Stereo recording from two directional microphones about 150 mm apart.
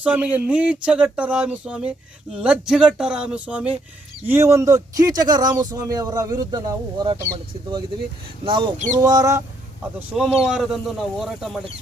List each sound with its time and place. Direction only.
0.0 s speech: 10° right (ahead or behind)
10.3 s speech: 5° right (ahead or behind)